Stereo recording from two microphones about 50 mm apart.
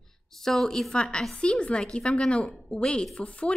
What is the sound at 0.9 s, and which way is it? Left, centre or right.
A woman's voice, centre.